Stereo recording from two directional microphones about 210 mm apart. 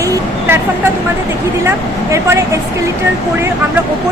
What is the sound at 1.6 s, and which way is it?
Speech, 10° right (ahead or behind).